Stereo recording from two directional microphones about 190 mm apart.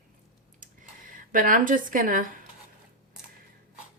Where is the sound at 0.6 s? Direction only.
45° right (ahead or behind).